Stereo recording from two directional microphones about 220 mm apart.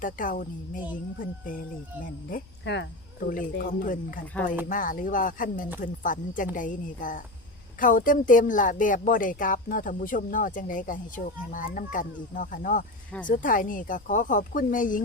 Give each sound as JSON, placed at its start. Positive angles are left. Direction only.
{"t": 0.0, "sound": "speech", "side_deg": 35}
{"t": 2.3, "sound": "speech", "side_deg": 45}